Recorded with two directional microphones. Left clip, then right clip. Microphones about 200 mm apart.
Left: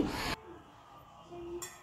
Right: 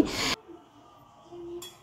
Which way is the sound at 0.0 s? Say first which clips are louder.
Right 8 dB; 35° right (ahead or behind).